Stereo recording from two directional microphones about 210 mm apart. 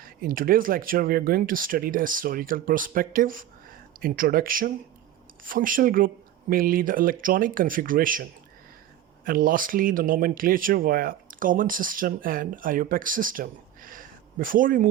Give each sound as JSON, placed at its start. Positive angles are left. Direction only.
{"t": 0.0, "sound": "speech", "side_deg": -45}